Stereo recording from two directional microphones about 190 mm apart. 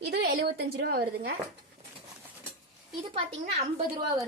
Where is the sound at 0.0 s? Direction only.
55° right (ahead or behind).